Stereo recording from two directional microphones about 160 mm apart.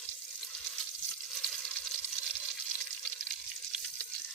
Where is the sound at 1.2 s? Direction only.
5° left (ahead or behind).